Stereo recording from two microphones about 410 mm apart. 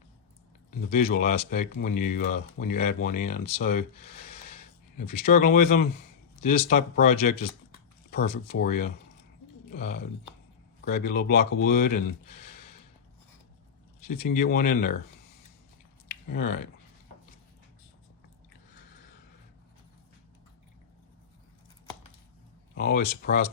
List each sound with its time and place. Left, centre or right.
0.8 s speech: left
5.2 s speech: left
10.8 s speech: left
14.2 s speech: left
16.3 s speech: left
22.7 s speech: left